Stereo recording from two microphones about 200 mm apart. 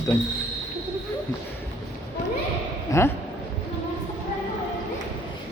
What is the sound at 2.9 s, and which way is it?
Speech, 15° left (ahead or behind).